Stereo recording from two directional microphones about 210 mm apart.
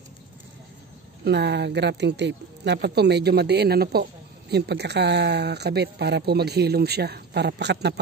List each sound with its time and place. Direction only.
1.2 s speech: 55° right (ahead or behind)